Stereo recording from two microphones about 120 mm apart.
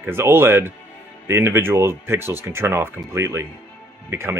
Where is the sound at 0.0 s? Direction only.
20° right (ahead or behind).